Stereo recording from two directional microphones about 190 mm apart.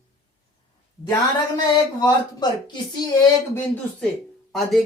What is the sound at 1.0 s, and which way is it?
Speech, 20° left (ahead or behind).